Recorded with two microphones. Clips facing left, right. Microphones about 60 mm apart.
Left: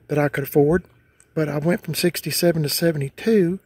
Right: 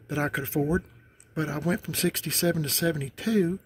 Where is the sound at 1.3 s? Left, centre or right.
Left.